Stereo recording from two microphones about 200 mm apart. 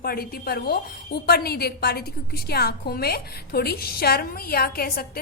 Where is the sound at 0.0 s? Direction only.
50° left (ahead or behind).